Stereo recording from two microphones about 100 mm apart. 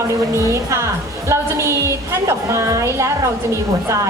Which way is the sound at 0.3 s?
30° right (ahead or behind).